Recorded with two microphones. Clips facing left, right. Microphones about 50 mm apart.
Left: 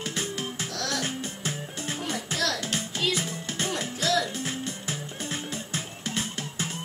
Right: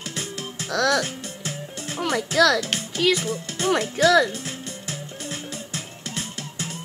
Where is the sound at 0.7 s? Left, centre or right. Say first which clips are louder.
Right 13 dB; right.